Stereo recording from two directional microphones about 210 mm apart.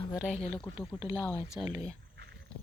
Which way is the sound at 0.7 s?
10° right (ahead or behind).